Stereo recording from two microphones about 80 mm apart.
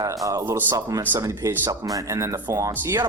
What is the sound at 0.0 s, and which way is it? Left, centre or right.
Speech, right.